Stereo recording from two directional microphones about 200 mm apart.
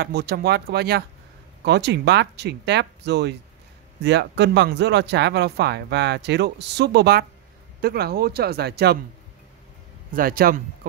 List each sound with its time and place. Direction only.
0.0 s speech: 50° right (ahead or behind)
10.1 s speech: 45° right (ahead or behind)